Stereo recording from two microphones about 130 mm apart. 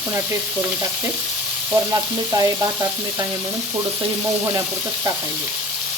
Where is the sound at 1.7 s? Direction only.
25° right (ahead or behind).